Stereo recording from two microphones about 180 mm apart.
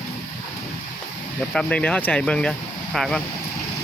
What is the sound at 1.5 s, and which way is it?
Speech, 5° left (ahead or behind).